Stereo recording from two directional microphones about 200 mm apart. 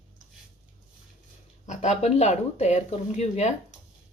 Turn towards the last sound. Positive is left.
turn(degrees=35)  # may be behind; listen again after turning